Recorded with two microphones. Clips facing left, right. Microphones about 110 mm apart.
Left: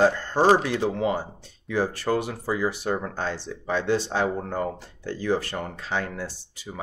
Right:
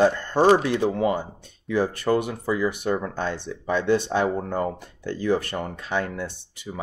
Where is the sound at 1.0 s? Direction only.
55° right (ahead or behind).